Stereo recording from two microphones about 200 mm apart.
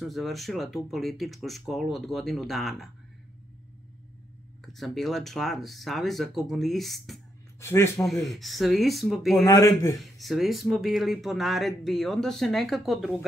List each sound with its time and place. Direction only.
0.0 s speech: centre (ahead or behind)
4.7 s speech: centre (ahead or behind)
7.6 s a man's voice: 15° left (ahead or behind)
8.0 s speech: centre (ahead or behind)
9.5 s a man's voice: 15° left (ahead or behind)
9.9 s speech: centre (ahead or behind)